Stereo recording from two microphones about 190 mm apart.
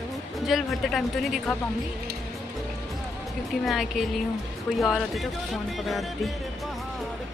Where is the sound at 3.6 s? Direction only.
Centre (ahead or behind).